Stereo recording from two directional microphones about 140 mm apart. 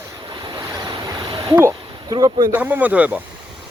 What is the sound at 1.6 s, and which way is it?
Speech, 25° right (ahead or behind).